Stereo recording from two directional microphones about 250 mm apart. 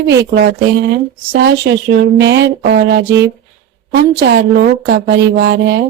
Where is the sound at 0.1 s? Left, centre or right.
Right.